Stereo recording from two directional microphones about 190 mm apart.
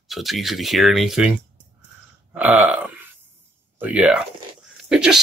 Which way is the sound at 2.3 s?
5° right (ahead or behind).